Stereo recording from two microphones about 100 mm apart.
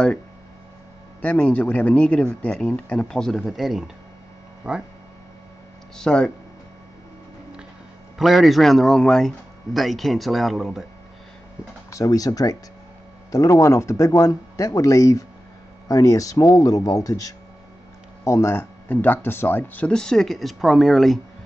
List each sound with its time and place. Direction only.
1.2 s speech: 15° left (ahead or behind); by 4.8 s 10° right (ahead or behind)
5.9 s speech: 10° left (ahead or behind)
8.2 s speech: centre (ahead or behind)
11.9 s speech: 35° left (ahead or behind); by 19.9 s 20° left (ahead or behind)
19.9 s speech: 5° left (ahead or behind)